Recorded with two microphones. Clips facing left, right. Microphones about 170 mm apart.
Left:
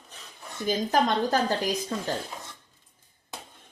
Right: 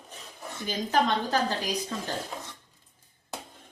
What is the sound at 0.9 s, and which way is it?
Speech, 45° left (ahead or behind).